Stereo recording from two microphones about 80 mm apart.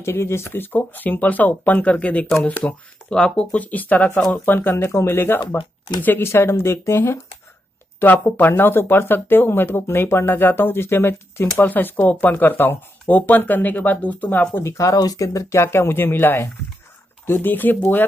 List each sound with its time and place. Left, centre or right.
0.0 s speech: left
8.0 s speech: left
14.6 s speech: left